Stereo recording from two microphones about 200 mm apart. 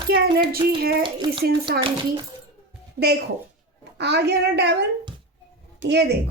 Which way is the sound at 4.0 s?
55° right (ahead or behind).